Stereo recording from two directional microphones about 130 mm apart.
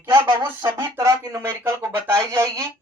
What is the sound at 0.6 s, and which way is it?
Speech, 15° right (ahead or behind).